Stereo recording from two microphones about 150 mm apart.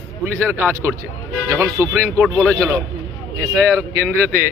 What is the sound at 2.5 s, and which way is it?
Speech, 20° right (ahead or behind).